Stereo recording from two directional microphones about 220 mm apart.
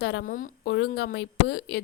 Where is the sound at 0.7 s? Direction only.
50° left (ahead or behind).